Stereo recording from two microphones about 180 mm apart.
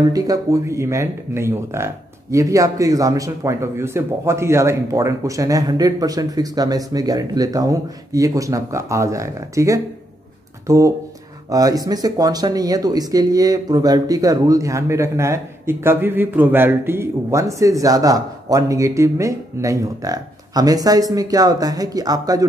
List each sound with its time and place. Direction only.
0.1 s speech: 20° right (ahead or behind)